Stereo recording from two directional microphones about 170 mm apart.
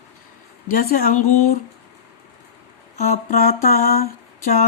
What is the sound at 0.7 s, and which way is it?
Speech, 60° left (ahead or behind).